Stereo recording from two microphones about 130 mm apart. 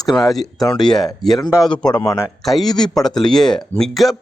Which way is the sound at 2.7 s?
30° left (ahead or behind).